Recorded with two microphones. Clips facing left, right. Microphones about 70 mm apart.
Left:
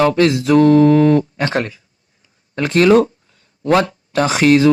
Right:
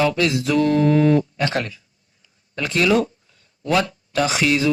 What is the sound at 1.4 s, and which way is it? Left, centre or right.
A man's voice, left.